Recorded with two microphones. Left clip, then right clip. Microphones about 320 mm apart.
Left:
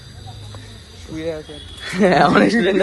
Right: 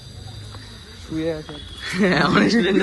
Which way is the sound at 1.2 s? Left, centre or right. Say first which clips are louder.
Right 1 dB; right.